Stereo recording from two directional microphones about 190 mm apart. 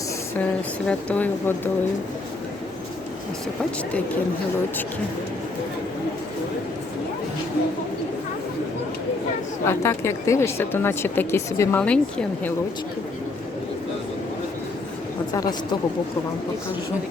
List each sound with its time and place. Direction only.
0.9 s speech: 5° left (ahead or behind)
9.6 s speech: 15° left (ahead or behind)
15.3 s a woman's voice: 20° left (ahead or behind)